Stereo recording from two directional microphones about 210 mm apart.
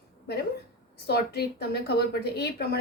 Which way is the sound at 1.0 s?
50° left (ahead or behind).